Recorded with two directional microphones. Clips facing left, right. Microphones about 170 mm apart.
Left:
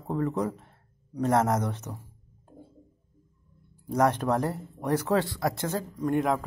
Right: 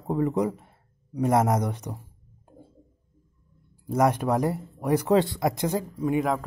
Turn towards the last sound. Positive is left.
turn(degrees=0)  # may be behind; listen again after turning